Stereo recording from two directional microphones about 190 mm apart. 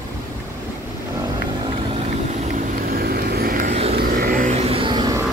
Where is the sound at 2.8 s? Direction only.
50° right (ahead or behind).